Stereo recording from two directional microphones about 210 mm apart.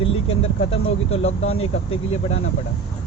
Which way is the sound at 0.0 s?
30° left (ahead or behind).